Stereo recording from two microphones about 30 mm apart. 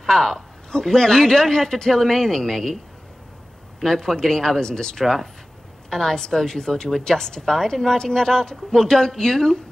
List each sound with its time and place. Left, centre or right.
0.0 s speech: centre
3.8 s speech: centre
5.0 s a woman's voice: centre